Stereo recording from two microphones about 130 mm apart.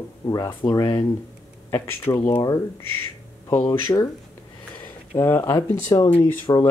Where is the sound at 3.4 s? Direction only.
35° left (ahead or behind).